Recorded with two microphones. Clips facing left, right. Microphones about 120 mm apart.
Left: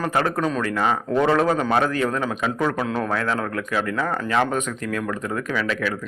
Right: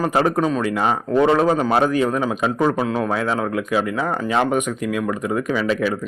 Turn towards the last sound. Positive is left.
turn(degrees=-20)  # may be behind; listen again after turning